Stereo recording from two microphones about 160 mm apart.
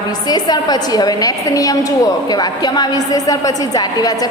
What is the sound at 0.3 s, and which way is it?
A woman's voice, 25° left (ahead or behind).